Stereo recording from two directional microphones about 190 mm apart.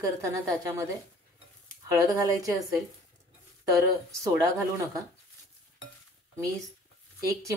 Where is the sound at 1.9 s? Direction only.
20° right (ahead or behind).